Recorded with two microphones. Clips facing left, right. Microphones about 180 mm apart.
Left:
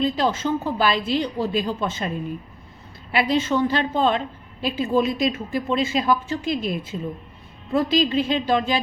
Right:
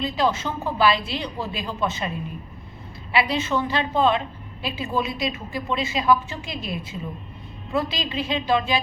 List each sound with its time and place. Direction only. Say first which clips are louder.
0.0 s speech: left 2 dB; 45° left (ahead or behind)